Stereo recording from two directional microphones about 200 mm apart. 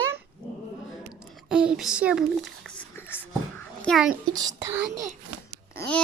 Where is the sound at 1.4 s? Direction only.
5° right (ahead or behind).